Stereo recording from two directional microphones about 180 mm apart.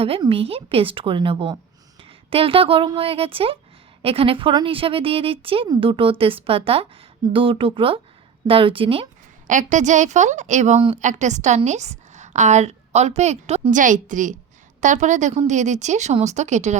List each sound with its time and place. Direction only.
0.0 s a woman's voice: 30° right (ahead or behind)
9.5 s a woman's voice: 45° right (ahead or behind)